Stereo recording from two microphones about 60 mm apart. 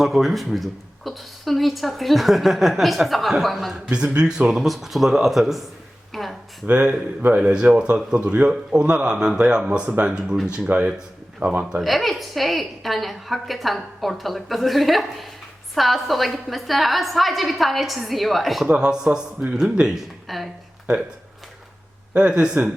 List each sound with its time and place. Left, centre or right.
0.0 s speech: centre
3.8 s speech: right
4.4 s speech: centre
6.1 s a sound: centre
6.7 s speech: right
11.8 s speech: centre
18.7 s speech: centre
22.1 s speech: right